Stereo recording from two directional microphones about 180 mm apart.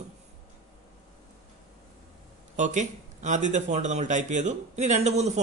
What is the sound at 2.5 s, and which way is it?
Speech, 40° right (ahead or behind).